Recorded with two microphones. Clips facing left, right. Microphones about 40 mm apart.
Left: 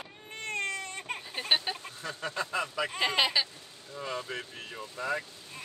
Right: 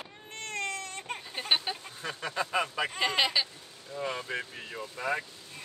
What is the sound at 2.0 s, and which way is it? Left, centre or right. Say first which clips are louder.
Speech: right 1 dB; right.